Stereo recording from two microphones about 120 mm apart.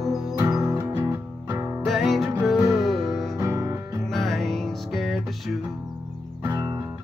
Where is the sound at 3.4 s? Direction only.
25° right (ahead or behind).